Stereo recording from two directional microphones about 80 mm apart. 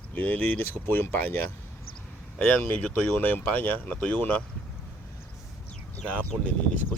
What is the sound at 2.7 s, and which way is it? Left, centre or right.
Speech, centre.